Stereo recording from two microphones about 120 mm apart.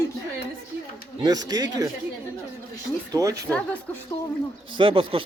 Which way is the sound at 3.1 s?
30° right (ahead or behind).